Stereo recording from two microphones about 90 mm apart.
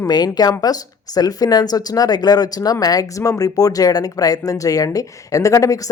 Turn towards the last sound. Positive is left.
turn(degrees=40)  # may be behind; listen again after turning